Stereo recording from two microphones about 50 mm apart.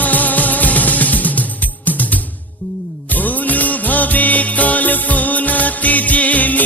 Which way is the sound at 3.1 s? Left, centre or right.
Left.